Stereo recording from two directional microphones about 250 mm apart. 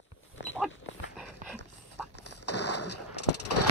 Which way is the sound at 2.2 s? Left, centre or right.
Left.